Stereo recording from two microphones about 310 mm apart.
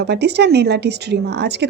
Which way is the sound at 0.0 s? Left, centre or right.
Right.